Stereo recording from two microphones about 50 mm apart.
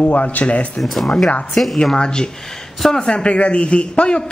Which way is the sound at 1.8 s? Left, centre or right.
Centre.